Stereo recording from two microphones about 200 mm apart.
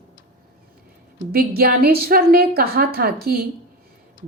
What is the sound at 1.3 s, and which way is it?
A woman's voice, 50° right (ahead or behind).